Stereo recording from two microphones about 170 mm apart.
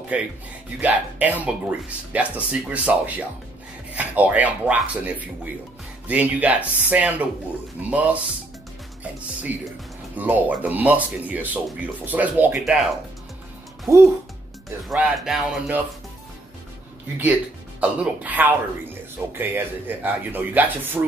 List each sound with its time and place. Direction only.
0.7 s speech: 10° right (ahead or behind)
9.5 s speech: 10° right (ahead or behind)
13.9 s speech: 15° right (ahead or behind)
14.9 s speech: 5° right (ahead or behind)
17.2 s speech: 10° right (ahead or behind)